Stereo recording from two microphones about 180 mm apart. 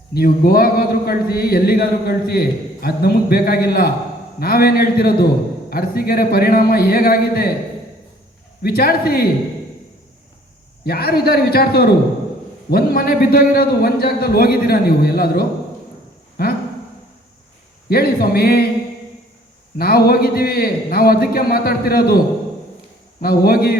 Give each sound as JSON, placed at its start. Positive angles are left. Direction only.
{"t": 0.1, "sound": "a man's voice", "side_deg": 55}
{"t": 8.6, "sound": "a man's voice", "side_deg": 55}
{"t": 10.8, "sound": "a man's voice", "side_deg": 60}
{"t": 17.8, "sound": "a man's voice", "side_deg": 60}
{"t": 19.8, "sound": "a man's voice", "side_deg": 55}
{"t": 23.2, "sound": "a man's voice", "side_deg": 55}